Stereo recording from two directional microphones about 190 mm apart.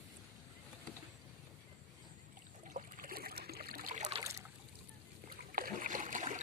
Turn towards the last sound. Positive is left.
turn(degrees=-40)  # may be behind; listen again after turning